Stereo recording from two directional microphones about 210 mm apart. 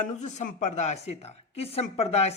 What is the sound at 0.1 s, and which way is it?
Speech, 35° left (ahead or behind).